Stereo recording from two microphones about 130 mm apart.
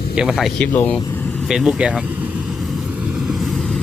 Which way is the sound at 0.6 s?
15° left (ahead or behind).